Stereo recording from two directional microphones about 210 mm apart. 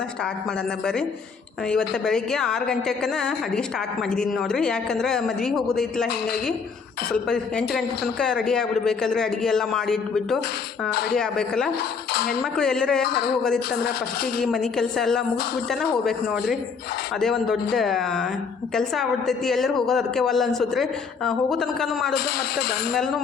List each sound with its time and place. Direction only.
1.9 s a woman's voice: 5° left (ahead or behind)
7.1 s a woman's voice: 5° left (ahead or behind)
12.1 s cutlery: 50° left (ahead or behind)
12.4 s a woman's voice: 5° left (ahead or behind)
13.1 s cutlery: 50° left (ahead or behind)
14.4 s a woman's voice: centre (ahead or behind)